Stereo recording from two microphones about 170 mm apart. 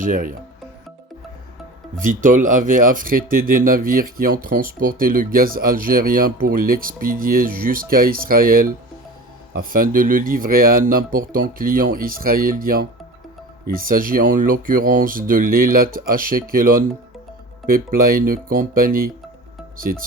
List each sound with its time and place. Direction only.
0.0 s speech: 50° right (ahead or behind)
2.0 s speech: 50° right (ahead or behind)